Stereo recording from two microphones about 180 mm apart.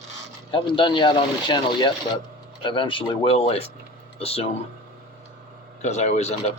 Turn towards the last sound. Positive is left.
turn(degrees=40)  # may be behind; listen again after turning